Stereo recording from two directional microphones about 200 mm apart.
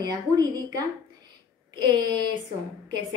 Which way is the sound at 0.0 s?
20° right (ahead or behind).